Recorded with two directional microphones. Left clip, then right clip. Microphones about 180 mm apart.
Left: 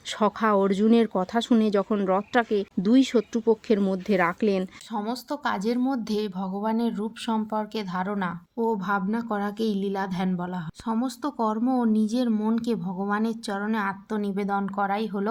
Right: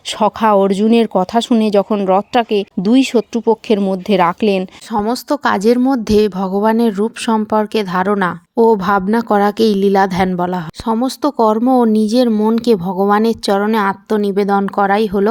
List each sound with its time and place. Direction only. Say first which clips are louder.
0.2 s speech: right 11 dB; 35° right (ahead or behind)